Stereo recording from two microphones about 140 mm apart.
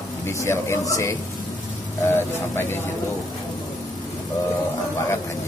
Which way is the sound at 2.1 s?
15° left (ahead or behind).